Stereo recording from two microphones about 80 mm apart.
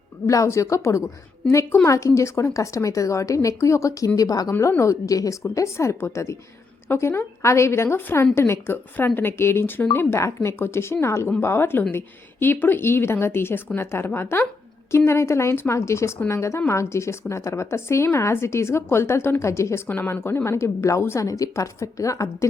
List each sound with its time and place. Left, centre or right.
0.3 s a woman's voice: left